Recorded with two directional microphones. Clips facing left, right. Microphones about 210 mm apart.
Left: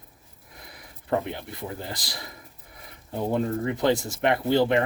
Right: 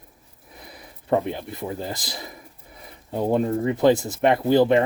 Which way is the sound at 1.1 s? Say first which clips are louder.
Right 4 dB; 20° right (ahead or behind).